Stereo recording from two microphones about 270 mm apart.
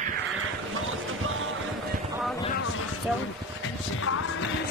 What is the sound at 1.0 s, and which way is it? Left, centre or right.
Music, right.